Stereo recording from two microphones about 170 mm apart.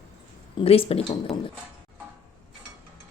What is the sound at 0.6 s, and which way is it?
Speech, 35° left (ahead or behind).